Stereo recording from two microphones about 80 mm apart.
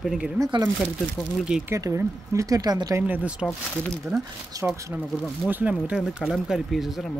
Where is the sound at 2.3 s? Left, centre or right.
Right.